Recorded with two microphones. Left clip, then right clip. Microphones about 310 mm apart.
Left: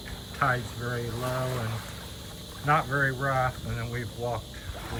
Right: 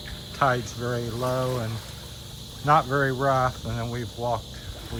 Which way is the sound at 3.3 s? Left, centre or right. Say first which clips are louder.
Right 4 dB; right.